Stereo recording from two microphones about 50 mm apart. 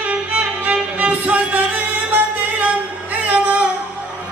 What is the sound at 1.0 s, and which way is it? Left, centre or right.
Music, right.